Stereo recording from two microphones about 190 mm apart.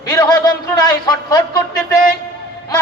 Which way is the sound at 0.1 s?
20° left (ahead or behind).